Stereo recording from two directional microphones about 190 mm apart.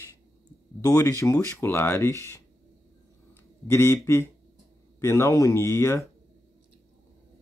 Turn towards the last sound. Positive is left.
turn(degrees=15)  # may be behind; listen again after turning